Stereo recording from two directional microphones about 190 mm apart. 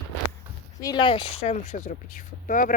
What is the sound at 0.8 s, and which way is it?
Speech, 20° left (ahead or behind).